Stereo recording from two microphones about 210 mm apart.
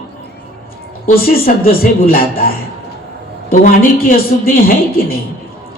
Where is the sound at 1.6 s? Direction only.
45° left (ahead or behind).